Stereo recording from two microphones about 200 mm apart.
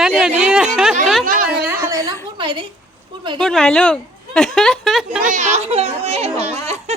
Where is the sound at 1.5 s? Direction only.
10° right (ahead or behind).